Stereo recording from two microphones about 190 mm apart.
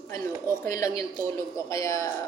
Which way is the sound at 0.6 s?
15° left (ahead or behind).